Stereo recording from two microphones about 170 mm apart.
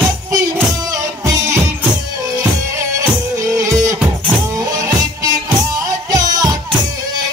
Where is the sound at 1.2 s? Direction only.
20° right (ahead or behind).